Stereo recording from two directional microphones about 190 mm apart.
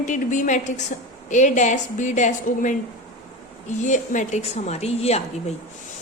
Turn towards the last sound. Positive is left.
turn(degrees=35)  # may be behind; listen again after turning